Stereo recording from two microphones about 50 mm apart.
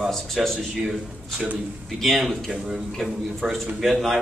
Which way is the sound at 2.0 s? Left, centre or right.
Centre.